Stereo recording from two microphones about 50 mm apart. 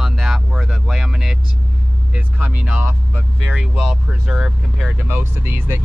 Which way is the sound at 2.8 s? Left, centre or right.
Right.